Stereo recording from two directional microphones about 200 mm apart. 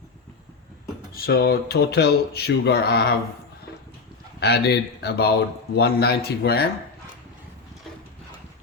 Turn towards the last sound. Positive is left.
turn(degrees=50)  # may be behind; listen again after turning